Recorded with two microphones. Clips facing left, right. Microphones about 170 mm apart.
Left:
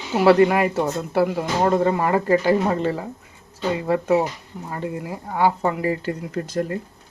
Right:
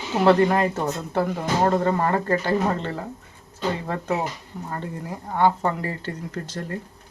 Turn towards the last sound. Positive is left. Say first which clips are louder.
# left 7 dB
turn(degrees=15)  # may be behind; listen again after turning